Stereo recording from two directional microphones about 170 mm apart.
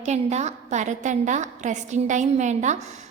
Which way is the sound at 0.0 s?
40° right (ahead or behind).